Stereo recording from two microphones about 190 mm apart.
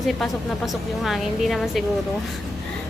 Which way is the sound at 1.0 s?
Centre (ahead or behind).